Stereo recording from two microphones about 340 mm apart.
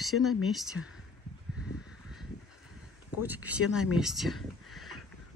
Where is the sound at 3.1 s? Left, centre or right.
Centre.